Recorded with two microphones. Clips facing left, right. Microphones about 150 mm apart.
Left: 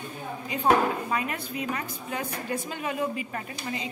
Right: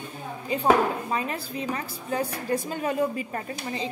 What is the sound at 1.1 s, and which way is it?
A woman's voice, 30° right (ahead or behind).